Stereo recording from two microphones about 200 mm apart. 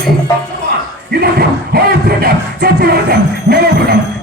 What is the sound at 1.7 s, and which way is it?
Music, 50° right (ahead or behind).